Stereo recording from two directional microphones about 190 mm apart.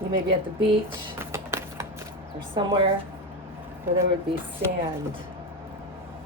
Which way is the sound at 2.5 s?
25° right (ahead or behind).